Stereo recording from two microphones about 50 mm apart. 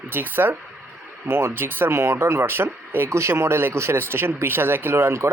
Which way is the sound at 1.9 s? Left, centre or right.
Right.